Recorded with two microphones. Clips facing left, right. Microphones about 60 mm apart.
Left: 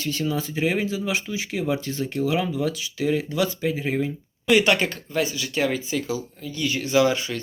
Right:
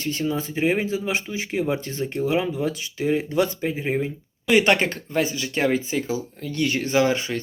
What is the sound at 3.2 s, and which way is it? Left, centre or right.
Speech, right.